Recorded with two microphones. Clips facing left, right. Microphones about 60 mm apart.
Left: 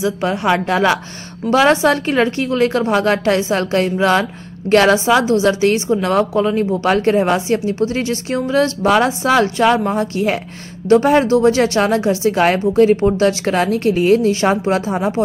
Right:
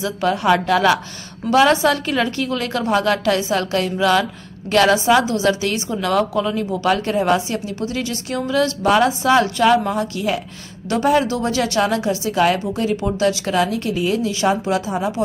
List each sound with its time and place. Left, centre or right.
0.0 s a woman's voice: left